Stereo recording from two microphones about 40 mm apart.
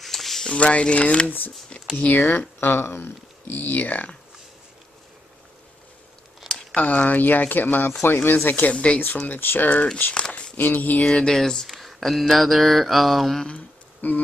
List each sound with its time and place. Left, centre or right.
0.0 s a sound: centre
0.5 s speech: left
2.3 s speech: left
6.7 s speech: left
7.2 s speech: left
8.0 s speech: left
8.5 s speech: left
8.7 s speech: left
9.3 s speech: left
10.1 s a sound: left
10.6 s speech: left
11.1 s speech: centre
11.9 s mantra: centre
14.0 s speech: left